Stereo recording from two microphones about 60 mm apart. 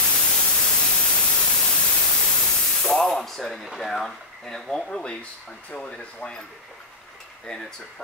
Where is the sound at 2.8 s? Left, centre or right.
Centre.